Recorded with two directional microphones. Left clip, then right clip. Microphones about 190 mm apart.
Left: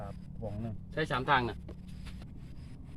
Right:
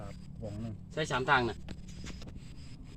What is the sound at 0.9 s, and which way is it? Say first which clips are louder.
Speech: right 1 dB; 50° right (ahead or behind).